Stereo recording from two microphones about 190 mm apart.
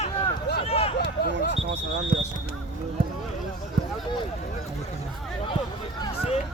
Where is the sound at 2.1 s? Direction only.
45° right (ahead or behind).